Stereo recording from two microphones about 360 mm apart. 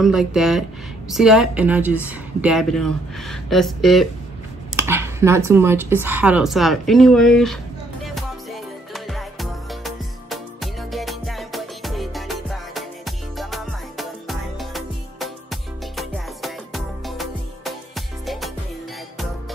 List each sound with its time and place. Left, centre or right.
0.0 s speech: centre
8.0 s music: centre